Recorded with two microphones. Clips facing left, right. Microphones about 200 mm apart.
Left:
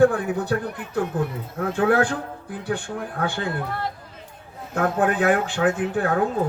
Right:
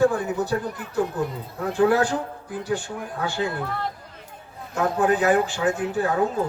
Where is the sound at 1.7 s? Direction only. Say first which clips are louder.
Right 1 dB; 55° left (ahead or behind).